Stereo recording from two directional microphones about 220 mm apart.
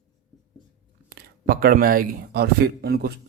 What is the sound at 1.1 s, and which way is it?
Speech, 45° right (ahead or behind).